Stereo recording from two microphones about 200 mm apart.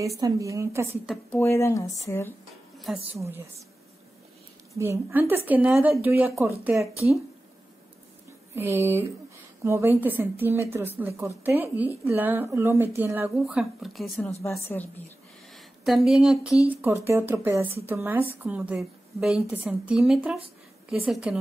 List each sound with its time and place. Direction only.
0.2 s speech: 15° right (ahead or behind)
1.0 s speech: centre (ahead or behind)
1.4 s speech: 15° left (ahead or behind)
4.7 s speech: 15° right (ahead or behind)
8.5 s speech: 10° right (ahead or behind)
14.4 s speech: 10° left (ahead or behind)
15.5 s speech: centre (ahead or behind)